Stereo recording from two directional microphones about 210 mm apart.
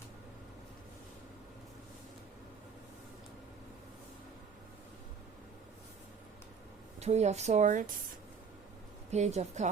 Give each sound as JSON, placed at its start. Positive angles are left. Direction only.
{"t": 7.0, "sound": "speech", "side_deg": -30}
{"t": 9.0, "sound": "speech", "side_deg": -30}